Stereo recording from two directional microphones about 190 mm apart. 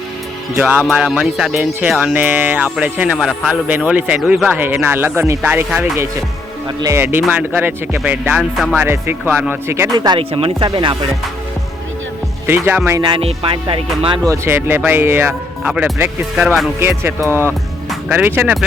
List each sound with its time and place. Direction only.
0.5 s music: 5° right (ahead or behind); by 11.1 s 25° right (ahead or behind)
12.5 s music: 10° right (ahead or behind)
13.0 s music: 25° right (ahead or behind)
14.4 s music: 10° right (ahead or behind)
17.8 s speech: 10° right (ahead or behind)